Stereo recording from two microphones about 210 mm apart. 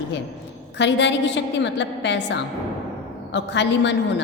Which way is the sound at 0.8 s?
60° left (ahead or behind).